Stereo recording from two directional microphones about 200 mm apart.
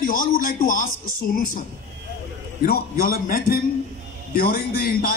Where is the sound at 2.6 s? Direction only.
50° left (ahead or behind).